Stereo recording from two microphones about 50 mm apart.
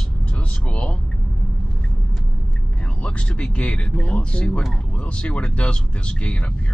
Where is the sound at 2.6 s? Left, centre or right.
Left.